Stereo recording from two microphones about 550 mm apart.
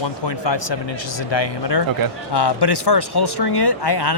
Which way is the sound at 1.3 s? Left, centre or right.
Left.